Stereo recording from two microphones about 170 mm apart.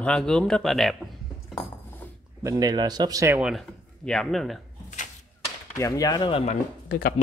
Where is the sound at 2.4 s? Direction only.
25° right (ahead or behind).